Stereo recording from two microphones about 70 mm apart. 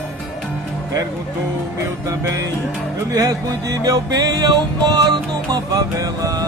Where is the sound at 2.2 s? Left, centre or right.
Right.